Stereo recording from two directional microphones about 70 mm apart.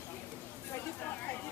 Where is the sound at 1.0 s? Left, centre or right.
Left.